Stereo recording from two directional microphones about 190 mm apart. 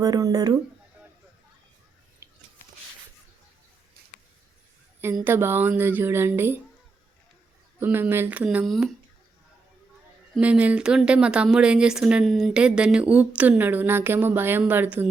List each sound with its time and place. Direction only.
0.0 s speech: 20° right (ahead or behind)
5.2 s speech: 10° right (ahead or behind)
7.8 s speech: 10° right (ahead or behind)
10.3 s speech: 5° right (ahead or behind)